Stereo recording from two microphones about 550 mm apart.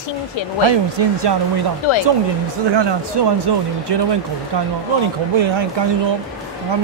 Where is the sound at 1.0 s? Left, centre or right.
Right.